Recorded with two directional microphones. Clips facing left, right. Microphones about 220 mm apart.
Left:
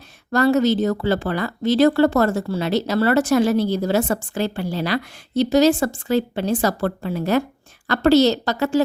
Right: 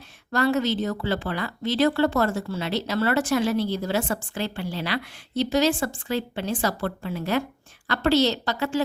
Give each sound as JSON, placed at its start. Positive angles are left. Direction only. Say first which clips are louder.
{"t": 0.3, "sound": "a woman's voice", "louder": "left 6 dB", "side_deg": 40}